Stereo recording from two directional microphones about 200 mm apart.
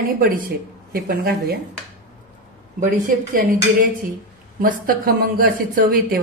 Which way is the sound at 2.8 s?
45° right (ahead or behind).